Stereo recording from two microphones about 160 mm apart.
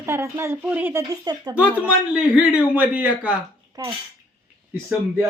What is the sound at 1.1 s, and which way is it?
Speech, 25° right (ahead or behind).